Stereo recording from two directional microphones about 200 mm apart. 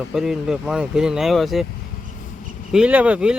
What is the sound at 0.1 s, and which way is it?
Speech, centre (ahead or behind).